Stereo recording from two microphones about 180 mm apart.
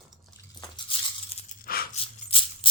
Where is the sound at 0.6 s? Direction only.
30° left (ahead or behind).